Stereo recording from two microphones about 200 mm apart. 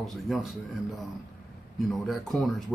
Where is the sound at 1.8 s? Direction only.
Centre (ahead or behind).